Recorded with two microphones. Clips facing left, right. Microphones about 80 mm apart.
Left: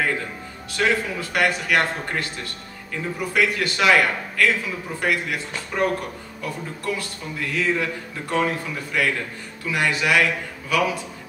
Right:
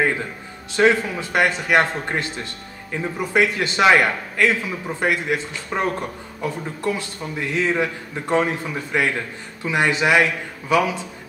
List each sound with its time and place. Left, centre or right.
0.7 s a man's voice: right